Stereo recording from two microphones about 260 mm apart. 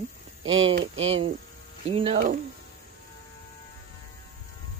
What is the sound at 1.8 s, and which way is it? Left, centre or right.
Speech, right.